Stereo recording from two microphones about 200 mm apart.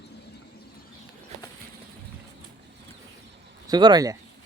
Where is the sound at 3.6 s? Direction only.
20° right (ahead or behind).